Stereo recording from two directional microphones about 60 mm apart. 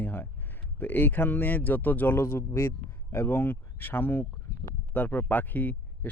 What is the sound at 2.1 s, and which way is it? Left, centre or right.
Speech, left.